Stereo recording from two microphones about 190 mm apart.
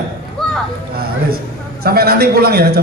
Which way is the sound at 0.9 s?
55° right (ahead or behind).